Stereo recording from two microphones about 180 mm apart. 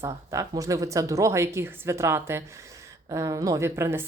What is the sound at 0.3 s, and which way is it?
Speech, 20° right (ahead or behind).